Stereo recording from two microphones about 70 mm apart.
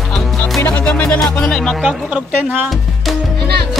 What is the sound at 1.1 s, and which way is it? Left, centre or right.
Music, centre.